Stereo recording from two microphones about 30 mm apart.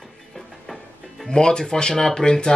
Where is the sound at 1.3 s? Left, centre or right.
Left.